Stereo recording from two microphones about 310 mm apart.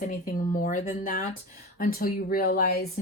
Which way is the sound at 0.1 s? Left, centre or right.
Left.